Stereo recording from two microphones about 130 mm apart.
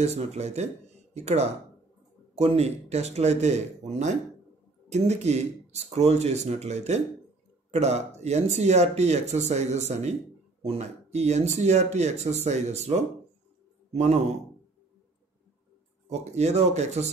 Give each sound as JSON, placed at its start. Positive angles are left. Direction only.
{"t": 0.0, "sound": "speech", "side_deg": -55}
{"t": 16.1, "sound": "speech", "side_deg": -55}